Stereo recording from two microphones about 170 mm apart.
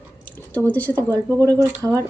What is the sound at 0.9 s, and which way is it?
Speech, 20° right (ahead or behind).